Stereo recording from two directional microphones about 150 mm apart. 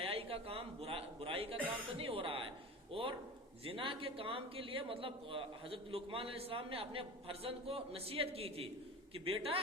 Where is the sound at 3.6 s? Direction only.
35° right (ahead or behind).